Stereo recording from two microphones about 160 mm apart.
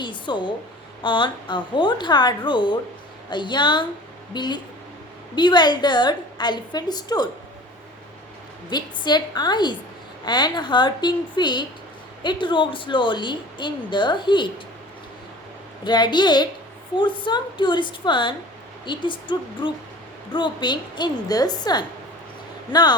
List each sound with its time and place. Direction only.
0.0 s a woman's voice: 30° left (ahead or behind)
8.7 s a woman's voice: 25° left (ahead or behind)
15.8 s a woman's voice: 25° left (ahead or behind)